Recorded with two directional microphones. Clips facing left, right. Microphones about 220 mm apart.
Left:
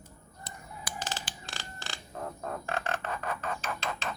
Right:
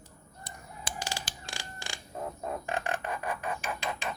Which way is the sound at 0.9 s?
25° right (ahead or behind).